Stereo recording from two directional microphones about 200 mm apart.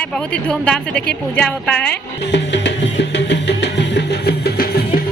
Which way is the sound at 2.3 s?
60° left (ahead or behind).